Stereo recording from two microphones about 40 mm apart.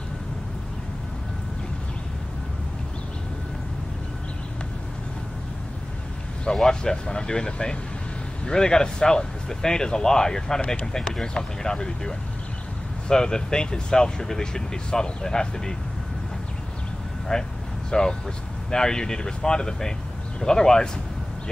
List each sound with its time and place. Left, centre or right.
6.4 s speech: centre
13.1 s speech: centre
17.3 s speech: centre